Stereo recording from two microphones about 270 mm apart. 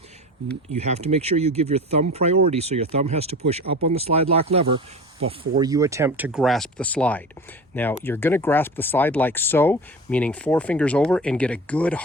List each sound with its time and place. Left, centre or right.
0.7 s speech: right; by 12.0 s centre